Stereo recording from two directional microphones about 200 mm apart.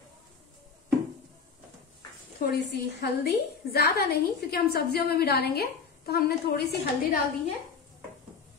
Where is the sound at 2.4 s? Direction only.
55° left (ahead or behind).